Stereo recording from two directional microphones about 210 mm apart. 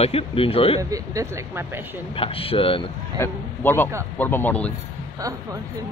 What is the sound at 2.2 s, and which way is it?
Speech, 25° left (ahead or behind).